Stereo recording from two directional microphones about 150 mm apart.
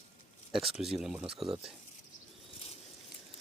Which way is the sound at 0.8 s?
Centre (ahead or behind).